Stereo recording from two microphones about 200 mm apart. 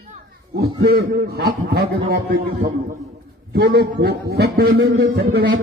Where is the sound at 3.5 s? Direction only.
55° right (ahead or behind).